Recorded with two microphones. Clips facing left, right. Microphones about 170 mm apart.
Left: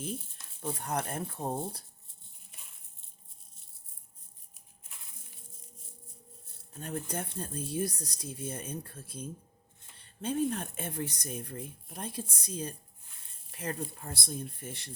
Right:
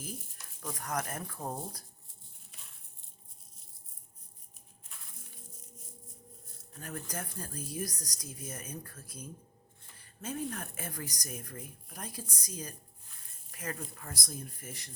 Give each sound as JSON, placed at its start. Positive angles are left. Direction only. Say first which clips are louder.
{"t": 0.6, "sound": "speech", "louder": "left 3 dB", "side_deg": 30}
{"t": 6.7, "sound": "speech", "louder": "left 4 dB", "side_deg": 25}